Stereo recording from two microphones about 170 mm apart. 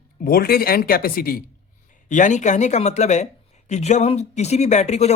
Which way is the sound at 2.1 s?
45° left (ahead or behind).